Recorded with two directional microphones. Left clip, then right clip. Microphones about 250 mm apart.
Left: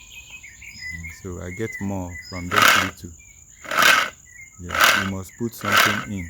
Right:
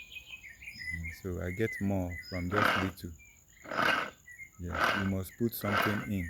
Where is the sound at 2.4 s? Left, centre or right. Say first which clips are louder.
Left 13 dB; left.